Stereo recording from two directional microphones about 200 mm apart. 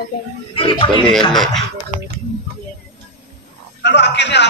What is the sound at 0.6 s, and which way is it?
Speech, 25° left (ahead or behind).